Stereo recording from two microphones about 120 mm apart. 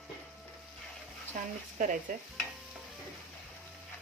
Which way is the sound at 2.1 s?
90° right.